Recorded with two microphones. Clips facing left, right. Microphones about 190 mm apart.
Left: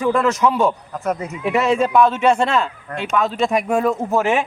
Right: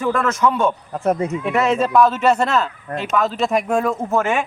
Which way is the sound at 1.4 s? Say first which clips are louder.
Left 1 dB; centre (ahead or behind).